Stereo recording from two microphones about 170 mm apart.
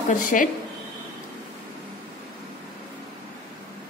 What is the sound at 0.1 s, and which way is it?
Speech, 55° left (ahead or behind).